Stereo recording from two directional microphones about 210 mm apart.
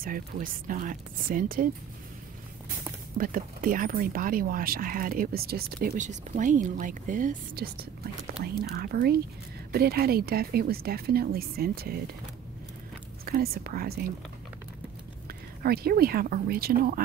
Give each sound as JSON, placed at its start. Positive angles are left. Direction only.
{"t": 0.0, "sound": "speech", "side_deg": -40}
{"t": 3.2, "sound": "speech", "side_deg": -40}
{"t": 13.2, "sound": "speech", "side_deg": -45}
{"t": 15.2, "sound": "speech", "side_deg": -45}